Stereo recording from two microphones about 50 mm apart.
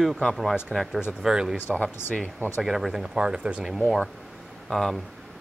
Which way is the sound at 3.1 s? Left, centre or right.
Right.